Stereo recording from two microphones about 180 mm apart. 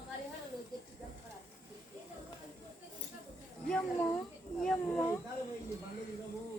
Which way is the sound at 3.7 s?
5° left (ahead or behind).